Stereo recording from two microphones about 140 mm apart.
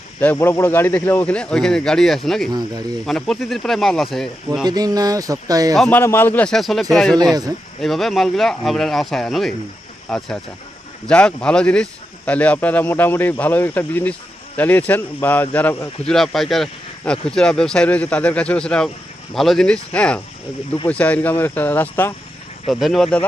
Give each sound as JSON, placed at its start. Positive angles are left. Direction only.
{"t": 0.2, "sound": "speech", "side_deg": 15}
{"t": 2.5, "sound": "a sound", "side_deg": -30}
{"t": 3.1, "sound": "speech", "side_deg": 0}
{"t": 4.6, "sound": "a sound", "side_deg": -30}
{"t": 5.7, "sound": "speech", "side_deg": 5}
{"t": 6.0, "sound": "speech", "side_deg": 15}
{"t": 16.0, "sound": "speech", "side_deg": 0}
{"t": 22.7, "sound": "speech", "side_deg": 0}